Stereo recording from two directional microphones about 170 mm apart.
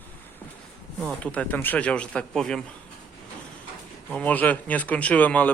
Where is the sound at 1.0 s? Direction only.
10° left (ahead or behind).